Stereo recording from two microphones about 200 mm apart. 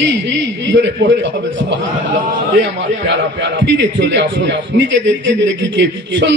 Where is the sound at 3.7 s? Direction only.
65° right (ahead or behind).